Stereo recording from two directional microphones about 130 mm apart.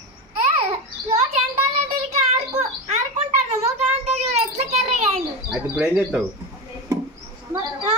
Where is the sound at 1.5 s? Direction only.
55° right (ahead or behind).